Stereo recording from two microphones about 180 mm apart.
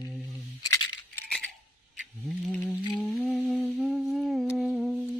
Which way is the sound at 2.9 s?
Centre (ahead or behind).